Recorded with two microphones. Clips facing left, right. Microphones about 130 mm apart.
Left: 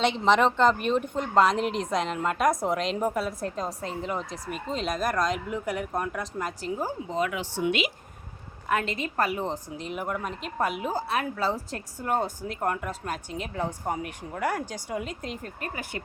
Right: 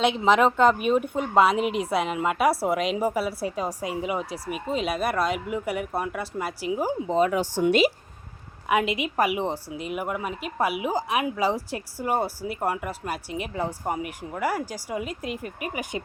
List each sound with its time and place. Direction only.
0.0 s speech: 5° right (ahead or behind)
7.1 s a woman's voice: 35° right (ahead or behind)
8.7 s speech: 15° right (ahead or behind)